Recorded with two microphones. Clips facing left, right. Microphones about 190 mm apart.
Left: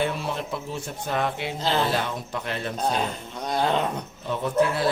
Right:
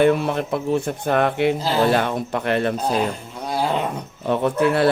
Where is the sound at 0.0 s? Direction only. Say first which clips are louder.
Right 10 dB; 60° right (ahead or behind).